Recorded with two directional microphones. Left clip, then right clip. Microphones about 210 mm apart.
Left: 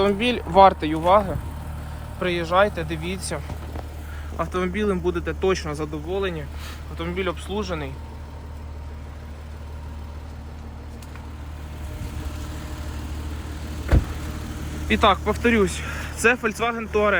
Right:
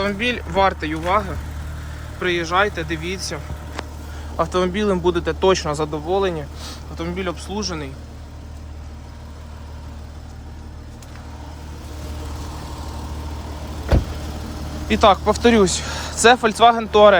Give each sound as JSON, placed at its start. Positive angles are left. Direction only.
{"t": 0.0, "sound": "speech", "side_deg": 15}
{"t": 2.1, "sound": "speech", "side_deg": 5}
{"t": 4.4, "sound": "speech", "side_deg": -25}
{"t": 6.9, "sound": "speech", "side_deg": -15}
{"t": 14.8, "sound": "speech", "side_deg": -20}